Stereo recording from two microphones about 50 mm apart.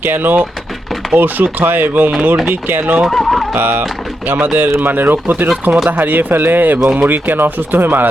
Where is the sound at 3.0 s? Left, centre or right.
Centre.